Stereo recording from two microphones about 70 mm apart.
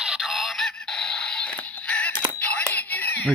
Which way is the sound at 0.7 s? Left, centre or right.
Centre.